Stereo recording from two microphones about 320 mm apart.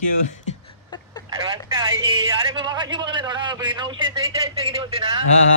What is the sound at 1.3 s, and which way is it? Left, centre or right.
A man's voice, centre.